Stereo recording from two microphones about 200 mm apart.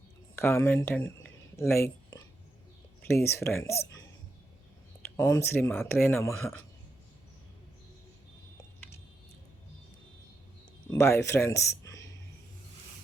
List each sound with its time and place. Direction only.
0.3 s speech: 10° left (ahead or behind)
1.5 s a sound: 15° left (ahead or behind)
3.1 s speech: 10° left (ahead or behind)
5.1 s speech: 15° left (ahead or behind)
10.9 s speech: 15° left (ahead or behind)